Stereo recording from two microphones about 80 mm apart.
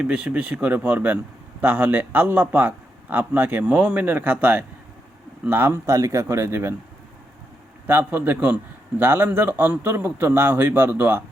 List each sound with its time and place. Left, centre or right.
0.0 s a man's voice: centre; by 6.7 s right
7.9 s a man's voice: right